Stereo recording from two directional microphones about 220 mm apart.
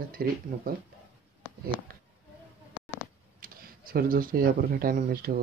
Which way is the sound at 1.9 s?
40° right (ahead or behind).